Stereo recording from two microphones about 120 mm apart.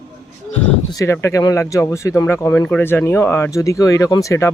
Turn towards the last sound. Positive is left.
turn(degrees=25)  # may be behind; listen again after turning